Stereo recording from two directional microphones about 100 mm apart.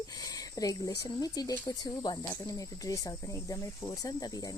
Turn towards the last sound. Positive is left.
turn(degrees=40)  # may be behind; listen again after turning